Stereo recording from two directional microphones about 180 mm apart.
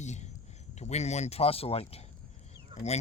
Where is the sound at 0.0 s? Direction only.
40° left (ahead or behind).